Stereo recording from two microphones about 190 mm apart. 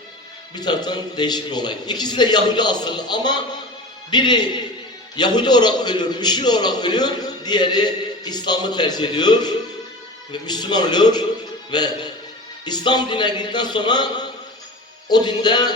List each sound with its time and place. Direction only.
0.5 s a man's voice: 20° left (ahead or behind)